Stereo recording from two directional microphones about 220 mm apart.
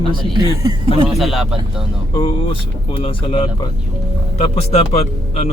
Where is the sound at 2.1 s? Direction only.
25° left (ahead or behind).